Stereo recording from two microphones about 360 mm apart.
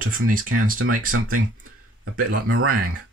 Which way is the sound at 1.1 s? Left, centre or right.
Right.